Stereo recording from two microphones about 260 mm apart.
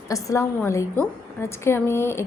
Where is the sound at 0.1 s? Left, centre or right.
Centre.